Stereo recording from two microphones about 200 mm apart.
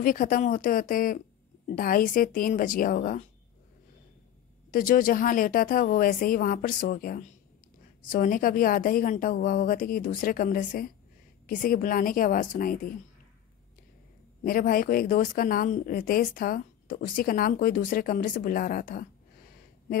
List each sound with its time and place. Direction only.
0.0 s speech: 45° left (ahead or behind)
4.6 s speech: 45° left (ahead or behind)
14.4 s speech: 45° left (ahead or behind)